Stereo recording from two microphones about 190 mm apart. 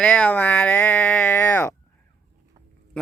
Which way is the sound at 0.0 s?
5° left (ahead or behind).